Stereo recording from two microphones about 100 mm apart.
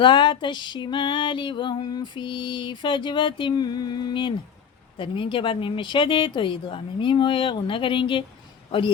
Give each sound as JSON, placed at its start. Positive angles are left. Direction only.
{"t": 0.0, "sound": "music", "side_deg": 50}
{"t": 4.9, "sound": "speech", "side_deg": 55}